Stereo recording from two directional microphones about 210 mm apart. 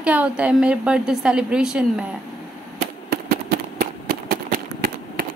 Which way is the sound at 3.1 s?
45° right (ahead or behind).